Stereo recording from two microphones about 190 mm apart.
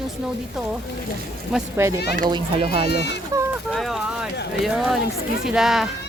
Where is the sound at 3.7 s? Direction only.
Centre (ahead or behind).